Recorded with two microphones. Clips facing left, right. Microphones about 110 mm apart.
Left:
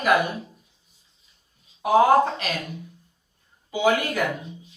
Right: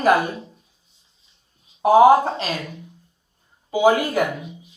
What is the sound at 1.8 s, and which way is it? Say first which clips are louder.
Speech: right 4 dB; 40° right (ahead or behind).